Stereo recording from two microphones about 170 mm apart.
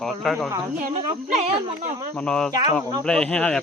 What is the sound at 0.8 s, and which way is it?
Speech, 45° right (ahead or behind).